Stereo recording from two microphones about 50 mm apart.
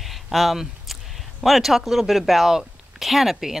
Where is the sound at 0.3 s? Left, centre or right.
Centre.